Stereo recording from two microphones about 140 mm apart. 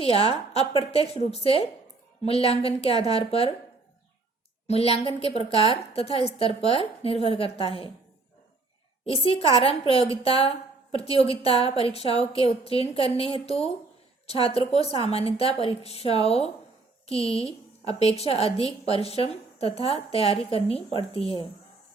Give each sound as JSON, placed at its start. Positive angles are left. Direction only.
{"t": 0.5, "sound": "a woman's voice", "side_deg": 45}
{"t": 4.6, "sound": "a woman's voice", "side_deg": 45}
{"t": 9.0, "sound": "a woman's voice", "side_deg": 40}